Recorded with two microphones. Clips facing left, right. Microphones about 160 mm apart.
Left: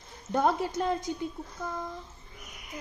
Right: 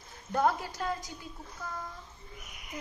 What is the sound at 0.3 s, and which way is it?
Speech, 25° left (ahead or behind).